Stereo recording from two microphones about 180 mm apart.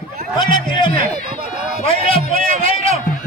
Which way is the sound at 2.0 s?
50° right (ahead or behind).